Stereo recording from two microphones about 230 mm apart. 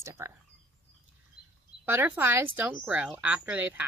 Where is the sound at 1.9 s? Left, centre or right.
Centre.